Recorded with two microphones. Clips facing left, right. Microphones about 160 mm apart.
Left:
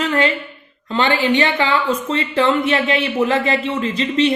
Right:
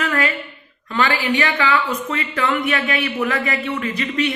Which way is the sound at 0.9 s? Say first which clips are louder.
Left 3 dB; 25° left (ahead or behind).